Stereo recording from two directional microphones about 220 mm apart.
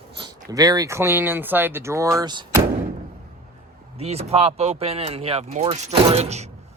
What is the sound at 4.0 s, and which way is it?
Speech, 30° right (ahead or behind).